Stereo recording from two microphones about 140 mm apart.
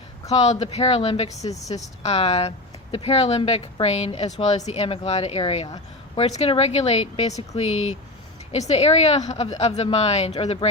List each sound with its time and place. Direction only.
0.6 s a woman's voice: 45° left (ahead or behind)